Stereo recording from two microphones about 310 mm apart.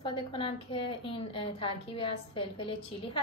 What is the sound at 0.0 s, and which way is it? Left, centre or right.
A woman's voice, centre.